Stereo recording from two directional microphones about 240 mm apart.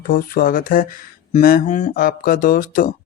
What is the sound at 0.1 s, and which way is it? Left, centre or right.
Speech, left.